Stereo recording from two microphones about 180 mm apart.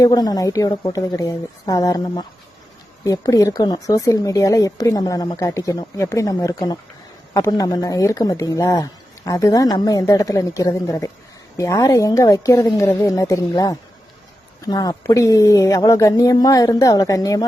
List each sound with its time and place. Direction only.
0.0 s a woman's voice: 20° left (ahead or behind)